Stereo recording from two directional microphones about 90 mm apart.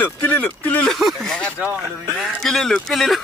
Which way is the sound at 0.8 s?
Centre (ahead or behind).